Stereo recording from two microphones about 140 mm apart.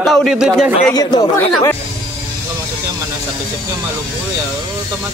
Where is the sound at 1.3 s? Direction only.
20° left (ahead or behind).